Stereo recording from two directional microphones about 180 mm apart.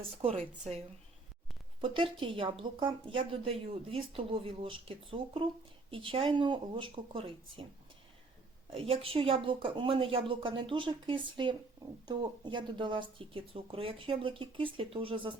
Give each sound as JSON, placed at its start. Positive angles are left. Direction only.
{"t": 0.2, "sound": "a woman's voice", "side_deg": -30}
{"t": 8.7, "sound": "speech", "side_deg": -30}